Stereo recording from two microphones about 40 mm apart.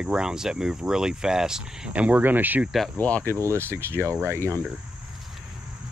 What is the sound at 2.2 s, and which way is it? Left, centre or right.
Speech, right.